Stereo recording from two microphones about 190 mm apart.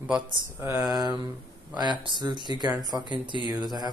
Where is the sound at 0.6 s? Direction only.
15° right (ahead or behind).